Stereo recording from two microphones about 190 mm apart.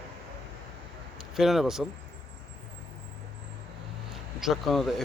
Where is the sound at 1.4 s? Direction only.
Centre (ahead or behind).